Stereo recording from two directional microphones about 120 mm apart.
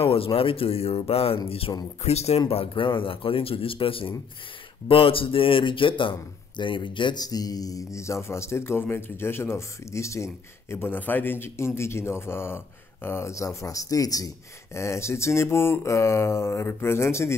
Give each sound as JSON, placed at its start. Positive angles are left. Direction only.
{"t": 0.0, "sound": "speech", "side_deg": 50}